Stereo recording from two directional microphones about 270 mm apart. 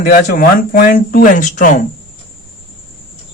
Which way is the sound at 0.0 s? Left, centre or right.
Left.